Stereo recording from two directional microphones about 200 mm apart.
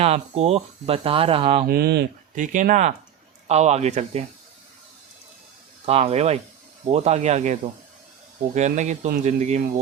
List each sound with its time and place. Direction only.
0.0 s speech: 30° right (ahead or behind)
1.6 s speech: 50° right (ahead or behind)
2.3 s a man's voice: 40° right (ahead or behind)
5.8 s a man's voice: 30° right (ahead or behind)